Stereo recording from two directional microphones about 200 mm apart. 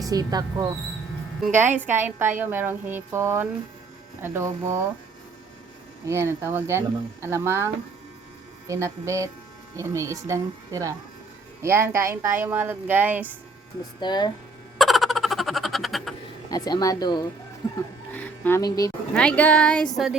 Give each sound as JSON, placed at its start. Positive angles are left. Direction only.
{"t": 0.0, "sound": "speech", "side_deg": -20}
{"t": 6.1, "sound": "speech", "side_deg": -15}
{"t": 14.0, "sound": "speech", "side_deg": 20}
{"t": 14.8, "sound": "a sound", "side_deg": 0}
{"t": 16.5, "sound": "speech", "side_deg": 20}
{"t": 18.1, "sound": "a sound", "side_deg": 10}
{"t": 19.1, "sound": "speech", "side_deg": 5}